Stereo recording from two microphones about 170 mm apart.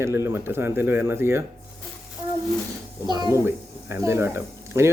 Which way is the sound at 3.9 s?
15° right (ahead or behind).